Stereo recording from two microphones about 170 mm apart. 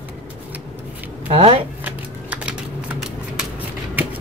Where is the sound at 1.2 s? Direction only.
35° right (ahead or behind).